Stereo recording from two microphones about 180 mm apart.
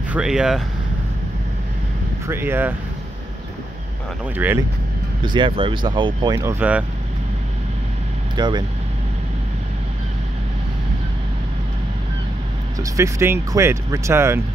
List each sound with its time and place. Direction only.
0.1 s speech: 5° right (ahead or behind)
2.2 s speech: 10° right (ahead or behind)
4.4 s speech: 10° right (ahead or behind)
5.2 s speech: 25° right (ahead or behind)
8.4 s speech: 25° right (ahead or behind)
12.9 s speech: 15° right (ahead or behind)